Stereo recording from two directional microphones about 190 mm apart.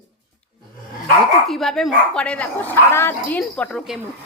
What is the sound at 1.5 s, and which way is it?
Speech, centre (ahead or behind).